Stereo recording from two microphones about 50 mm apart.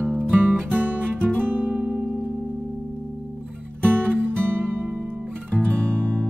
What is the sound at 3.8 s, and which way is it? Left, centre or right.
Music, right.